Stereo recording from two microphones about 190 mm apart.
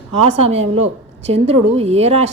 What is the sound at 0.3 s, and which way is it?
A woman's voice, 35° right (ahead or behind).